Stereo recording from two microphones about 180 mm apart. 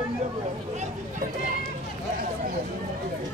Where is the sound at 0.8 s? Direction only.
45° right (ahead or behind).